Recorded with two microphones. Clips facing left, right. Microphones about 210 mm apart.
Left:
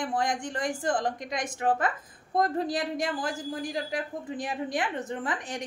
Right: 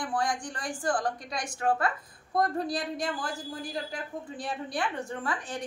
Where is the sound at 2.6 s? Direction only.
90° left.